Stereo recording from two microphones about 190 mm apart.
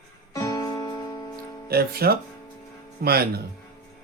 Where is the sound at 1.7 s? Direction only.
55° right (ahead or behind).